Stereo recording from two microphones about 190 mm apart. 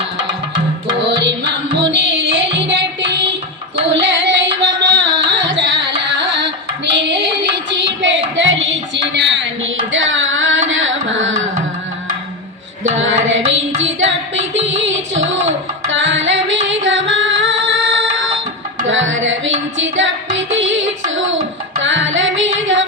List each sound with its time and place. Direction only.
0.9 s music: 70° right (ahead or behind)
3.8 s carnatic music: 70° right (ahead or behind)
6.0 s music: 65° right (ahead or behind); by 11.3 s 85° right
13.0 s music: 90° right
13.8 s music: 80° right